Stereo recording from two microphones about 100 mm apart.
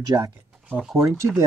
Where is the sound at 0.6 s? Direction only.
10° right (ahead or behind).